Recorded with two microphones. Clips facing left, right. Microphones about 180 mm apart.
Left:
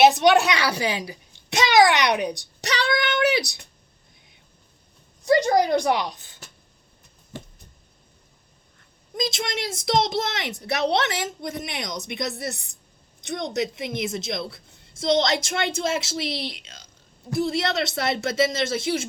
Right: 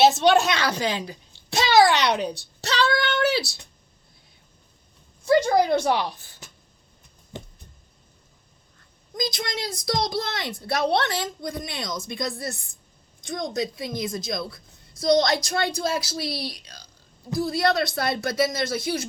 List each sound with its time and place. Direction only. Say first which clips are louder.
0.0 s a child's voice: left 1 dB; 15° left (ahead or behind)
5.2 s a child's voice: even; 15° left (ahead or behind)
7.3 s a sound: even; 20° right (ahead or behind)
9.1 s a woman's voice: left 1 dB; 25° left (ahead or behind)